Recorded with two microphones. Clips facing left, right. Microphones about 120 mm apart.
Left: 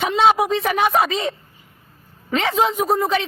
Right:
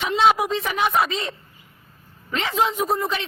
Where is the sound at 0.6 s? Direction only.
50° left (ahead or behind).